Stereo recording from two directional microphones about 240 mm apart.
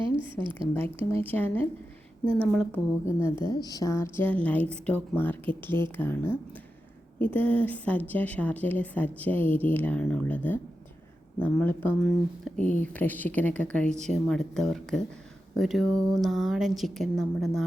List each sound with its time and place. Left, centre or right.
0.0 s a woman's voice: right
1.1 s a woman's voice: centre